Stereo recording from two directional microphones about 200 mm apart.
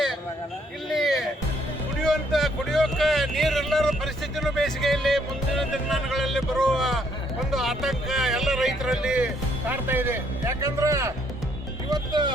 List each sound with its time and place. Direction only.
0.9 s music: centre (ahead or behind)
2.0 s speech: centre (ahead or behind); by 12.3 s 20° right (ahead or behind)